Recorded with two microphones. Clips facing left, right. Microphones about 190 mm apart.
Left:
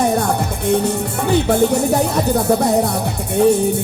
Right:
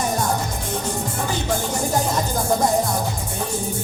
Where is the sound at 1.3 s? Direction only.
65° left (ahead or behind).